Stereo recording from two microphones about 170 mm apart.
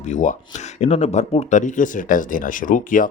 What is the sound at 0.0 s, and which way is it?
Speech, 45° left (ahead or behind).